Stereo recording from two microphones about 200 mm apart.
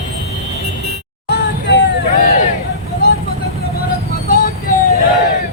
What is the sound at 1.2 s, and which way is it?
Music, 55° left (ahead or behind).